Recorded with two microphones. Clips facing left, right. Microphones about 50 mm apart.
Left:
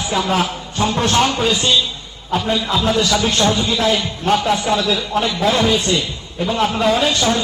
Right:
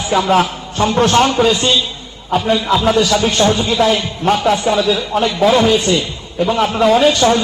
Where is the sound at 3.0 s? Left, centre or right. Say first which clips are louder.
Right 3 dB; centre.